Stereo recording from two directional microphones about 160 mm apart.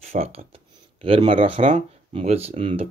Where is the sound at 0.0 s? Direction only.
45° right (ahead or behind).